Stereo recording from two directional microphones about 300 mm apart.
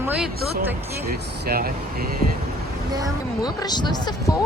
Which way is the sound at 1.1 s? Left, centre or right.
Right.